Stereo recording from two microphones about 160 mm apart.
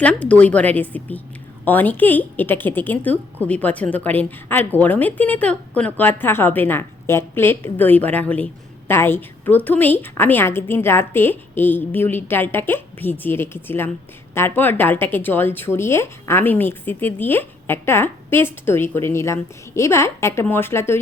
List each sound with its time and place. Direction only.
0.0 s speech: 10° left (ahead or behind)